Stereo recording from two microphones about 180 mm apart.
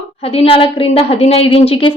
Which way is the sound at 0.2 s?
35° left (ahead or behind).